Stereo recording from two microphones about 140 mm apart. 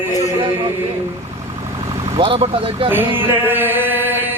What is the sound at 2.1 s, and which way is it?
Speech, 40° right (ahead or behind).